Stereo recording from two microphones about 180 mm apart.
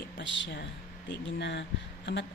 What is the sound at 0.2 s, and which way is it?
Speech, 80° left.